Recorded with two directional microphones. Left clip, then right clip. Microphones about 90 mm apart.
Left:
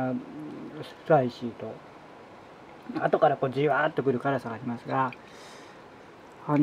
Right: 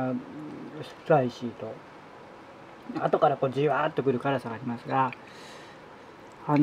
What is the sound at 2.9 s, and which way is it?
Speech, 20° left (ahead or behind).